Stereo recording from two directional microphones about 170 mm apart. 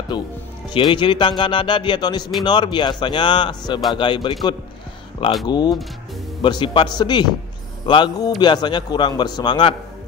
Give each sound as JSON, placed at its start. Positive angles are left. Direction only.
{"t": 0.1, "sound": "speech", "side_deg": 25}